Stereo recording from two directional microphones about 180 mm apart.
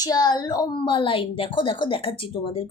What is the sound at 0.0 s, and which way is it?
Speech, 20° left (ahead or behind).